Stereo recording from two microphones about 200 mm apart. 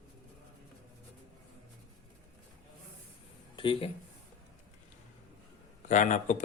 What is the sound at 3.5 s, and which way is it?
Speech, 25° left (ahead or behind).